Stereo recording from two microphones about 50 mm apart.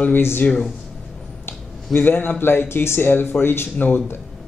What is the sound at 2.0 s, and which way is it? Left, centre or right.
Speech, left.